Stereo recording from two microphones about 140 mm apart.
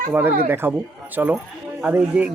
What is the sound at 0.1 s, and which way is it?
Speech, 15° right (ahead or behind).